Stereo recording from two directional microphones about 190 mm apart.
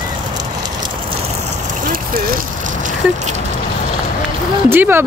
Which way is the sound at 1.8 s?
50° right (ahead or behind).